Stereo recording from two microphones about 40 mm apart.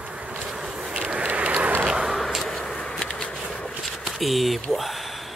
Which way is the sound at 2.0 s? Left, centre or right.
Centre.